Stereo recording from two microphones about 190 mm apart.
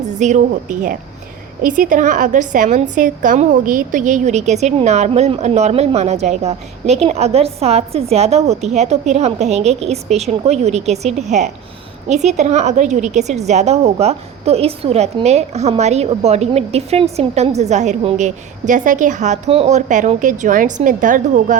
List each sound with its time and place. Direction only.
0.0 s a woman's voice: 40° right (ahead or behind)